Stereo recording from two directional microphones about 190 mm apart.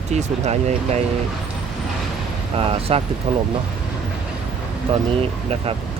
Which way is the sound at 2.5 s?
30° right (ahead or behind).